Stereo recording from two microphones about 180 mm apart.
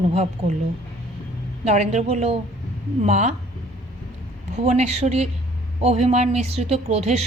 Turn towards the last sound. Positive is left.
turn(degrees=-35)  # may be behind; listen again after turning